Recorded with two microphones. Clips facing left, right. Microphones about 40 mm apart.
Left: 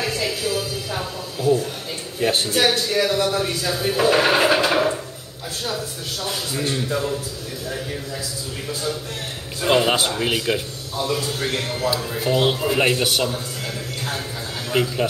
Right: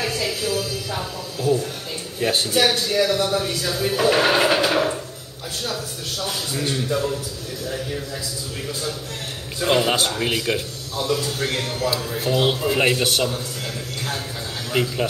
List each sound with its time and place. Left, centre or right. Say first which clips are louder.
0.0 s music: left 1 dB; centre
0.9 s a sound: left 1 dB; centre
2.1 s a man's voice: even; centre
3.0 s speech: right 1 dB; centre
6.2 s speech: left 1 dB; centre
9.6 s speech: left 1 dB; centre
11.0 s a man's voice: even; left
11.8 s a man's voice: left 1 dB; centre
14.7 s a man's voice: left 1 dB; centre